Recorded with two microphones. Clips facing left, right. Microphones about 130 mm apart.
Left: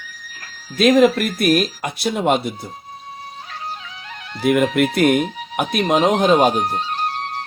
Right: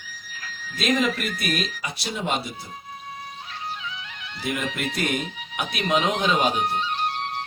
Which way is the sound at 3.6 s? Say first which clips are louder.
Even; 40° left (ahead or behind).